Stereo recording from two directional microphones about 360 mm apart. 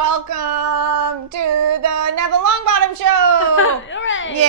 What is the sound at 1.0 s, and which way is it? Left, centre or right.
Child singing, right.